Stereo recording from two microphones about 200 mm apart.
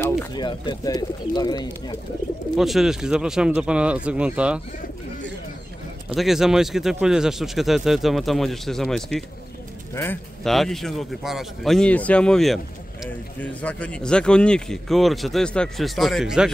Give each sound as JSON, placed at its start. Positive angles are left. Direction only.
{"t": 0.2, "sound": "speech", "side_deg": 20}
{"t": 2.5, "sound": "speech", "side_deg": 0}
{"t": 6.1, "sound": "speech", "side_deg": 0}